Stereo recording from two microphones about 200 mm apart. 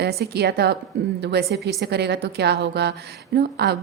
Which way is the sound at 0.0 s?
55° right (ahead or behind).